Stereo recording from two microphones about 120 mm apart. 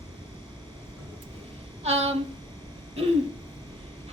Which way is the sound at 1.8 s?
60° right (ahead or behind).